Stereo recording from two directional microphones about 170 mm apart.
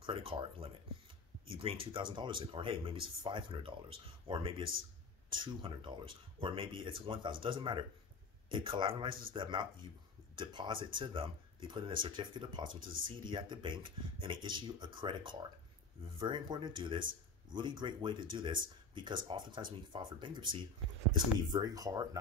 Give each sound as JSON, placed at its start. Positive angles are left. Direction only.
{"t": 0.0, "sound": "speech", "side_deg": -30}